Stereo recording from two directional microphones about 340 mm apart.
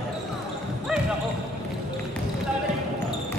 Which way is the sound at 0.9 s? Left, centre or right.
Centre.